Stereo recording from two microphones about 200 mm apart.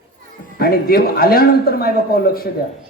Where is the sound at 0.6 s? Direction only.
45° left (ahead or behind).